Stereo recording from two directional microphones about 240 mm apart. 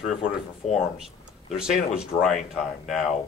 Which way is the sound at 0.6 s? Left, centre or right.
Left.